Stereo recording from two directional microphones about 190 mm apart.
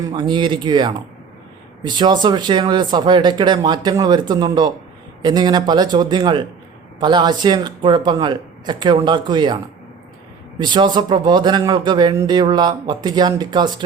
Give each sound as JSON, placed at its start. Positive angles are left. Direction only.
{"t": 0.1, "sound": "speech", "side_deg": -25}
{"t": 10.6, "sound": "speech", "side_deg": -25}